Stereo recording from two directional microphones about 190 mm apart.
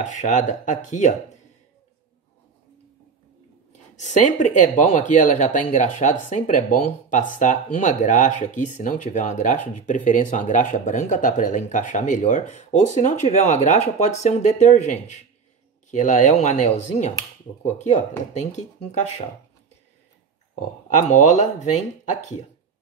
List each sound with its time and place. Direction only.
0.0 s speech: 40° left (ahead or behind)
3.9 s speech: 40° left (ahead or behind)
20.9 s speech: 40° left (ahead or behind)